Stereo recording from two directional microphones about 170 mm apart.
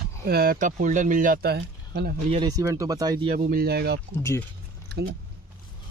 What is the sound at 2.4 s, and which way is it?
Speech, 20° right (ahead or behind).